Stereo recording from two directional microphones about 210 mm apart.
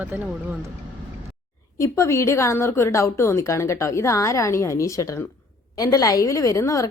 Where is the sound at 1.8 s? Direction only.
15° left (ahead or behind).